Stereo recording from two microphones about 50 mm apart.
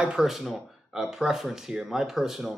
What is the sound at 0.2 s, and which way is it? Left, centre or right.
Speech, centre.